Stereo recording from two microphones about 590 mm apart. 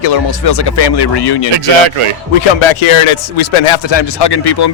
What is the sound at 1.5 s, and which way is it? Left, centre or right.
Speech, right.